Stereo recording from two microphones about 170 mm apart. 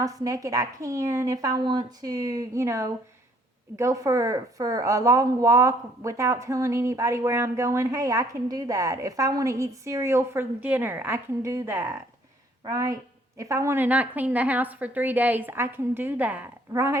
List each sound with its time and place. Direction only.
0.0 s a woman's voice: 20° right (ahead or behind)